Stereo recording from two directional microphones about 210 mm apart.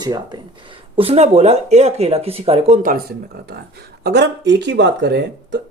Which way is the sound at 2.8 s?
40° right (ahead or behind).